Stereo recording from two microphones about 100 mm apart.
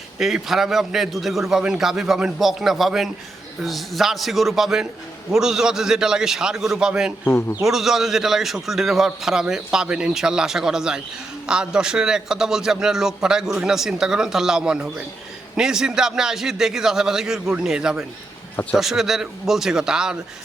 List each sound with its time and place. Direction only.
0.2 s a man's voice: 5° right (ahead or behind)
7.3 s a man's voice: 25° left (ahead or behind)
7.6 s a man's voice: 5° right (ahead or behind)